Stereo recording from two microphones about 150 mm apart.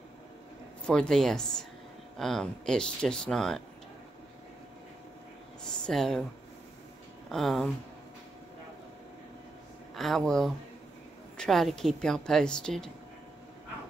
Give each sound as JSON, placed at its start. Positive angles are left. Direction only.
{"t": 0.8, "sound": "speech", "side_deg": 5}
{"t": 5.6, "sound": "a sound", "side_deg": 5}
{"t": 7.2, "sound": "speech", "side_deg": 0}
{"t": 9.9, "sound": "speech", "side_deg": 0}